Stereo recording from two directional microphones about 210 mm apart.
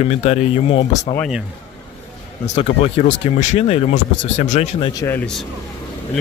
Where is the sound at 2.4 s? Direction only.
35° left (ahead or behind).